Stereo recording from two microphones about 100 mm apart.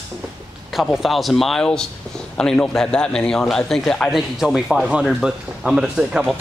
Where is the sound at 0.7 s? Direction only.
Centre (ahead or behind).